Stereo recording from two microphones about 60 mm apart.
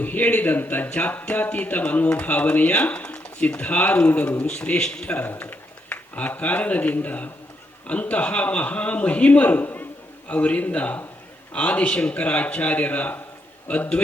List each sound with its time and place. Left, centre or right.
0.0 s speech: left
4.4 s a man's voice: centre
5.0 s speech: left